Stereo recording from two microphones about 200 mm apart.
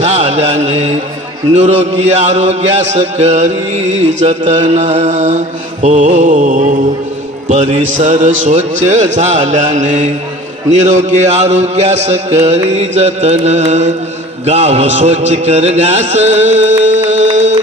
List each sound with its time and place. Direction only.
0.0 s music: 35° right (ahead or behind)
1.5 s a man's voice: 35° right (ahead or behind)